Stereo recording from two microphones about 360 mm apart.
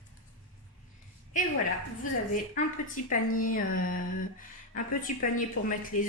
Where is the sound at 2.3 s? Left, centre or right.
Left.